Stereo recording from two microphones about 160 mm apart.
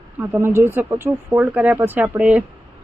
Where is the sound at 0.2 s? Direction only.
15° right (ahead or behind).